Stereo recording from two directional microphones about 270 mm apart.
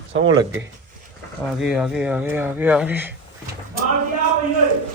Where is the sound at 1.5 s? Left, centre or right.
Centre.